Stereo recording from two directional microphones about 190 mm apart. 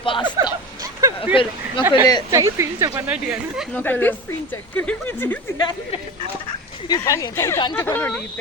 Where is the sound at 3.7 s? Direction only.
10° left (ahead or behind).